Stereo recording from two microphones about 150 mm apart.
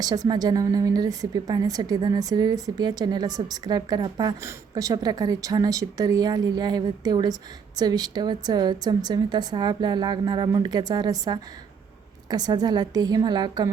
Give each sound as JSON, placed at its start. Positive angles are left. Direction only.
{"t": 0.0, "sound": "a woman's voice", "side_deg": -25}